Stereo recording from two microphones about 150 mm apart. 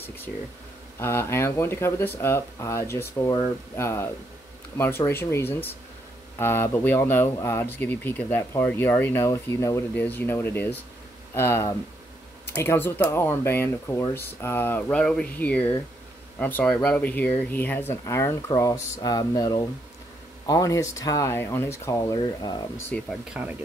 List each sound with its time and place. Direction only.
0.0 s speech: 15° left (ahead or behind)
22.9 s speech: 10° left (ahead or behind)
23.3 s speech: centre (ahead or behind)